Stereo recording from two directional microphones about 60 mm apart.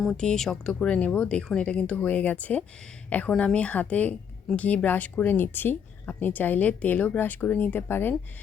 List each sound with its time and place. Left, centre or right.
0.1 s speech: centre
0.7 s speech: centre; by 8.1 s left